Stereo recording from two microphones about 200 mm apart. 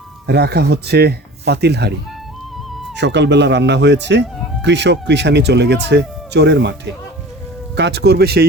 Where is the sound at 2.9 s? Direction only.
60° right (ahead or behind).